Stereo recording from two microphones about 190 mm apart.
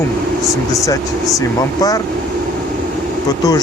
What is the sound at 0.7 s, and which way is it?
Speech, 15° left (ahead or behind).